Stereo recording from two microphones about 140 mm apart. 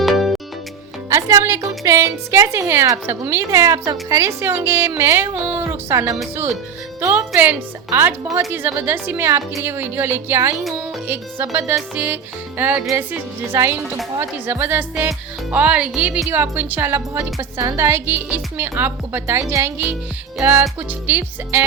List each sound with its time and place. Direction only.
0.0 s music: centre (ahead or behind)
1.1 s a woman's voice: 20° right (ahead or behind)
10.6 s speech: centre (ahead or behind)
11.1 s a woman's voice: 15° right (ahead or behind)
12.8 s a woman's voice: 20° right (ahead or behind)